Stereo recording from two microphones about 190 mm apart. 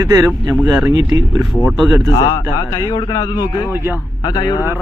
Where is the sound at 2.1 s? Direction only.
25° left (ahead or behind).